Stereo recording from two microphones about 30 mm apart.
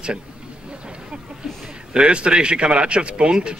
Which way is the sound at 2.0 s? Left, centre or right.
Right.